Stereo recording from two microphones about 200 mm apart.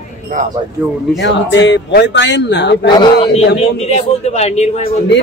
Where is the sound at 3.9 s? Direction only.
35° left (ahead or behind).